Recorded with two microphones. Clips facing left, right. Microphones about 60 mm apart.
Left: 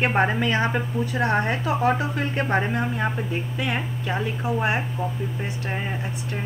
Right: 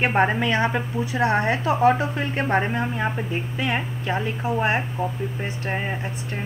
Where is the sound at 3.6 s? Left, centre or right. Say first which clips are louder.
Right 3 dB; right.